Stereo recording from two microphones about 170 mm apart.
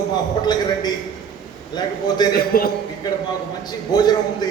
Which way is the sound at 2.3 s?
60° left (ahead or behind).